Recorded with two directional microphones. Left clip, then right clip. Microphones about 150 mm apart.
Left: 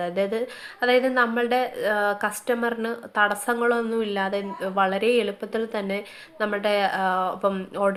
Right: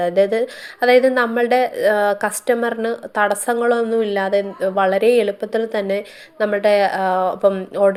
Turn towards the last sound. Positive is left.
turn(degrees=-30)  # may be behind; listen again after turning